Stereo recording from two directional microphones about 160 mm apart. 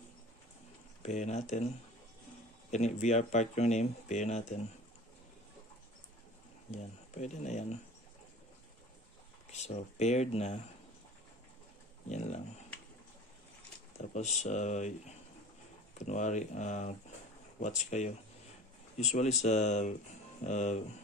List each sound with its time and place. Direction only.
1.0 s speech: 45° left (ahead or behind)
2.7 s speech: 45° left (ahead or behind)
6.7 s speech: 45° left (ahead or behind)
9.5 s speech: 45° left (ahead or behind)
12.1 s speech: 45° left (ahead or behind)
13.9 s speech: 45° left (ahead or behind)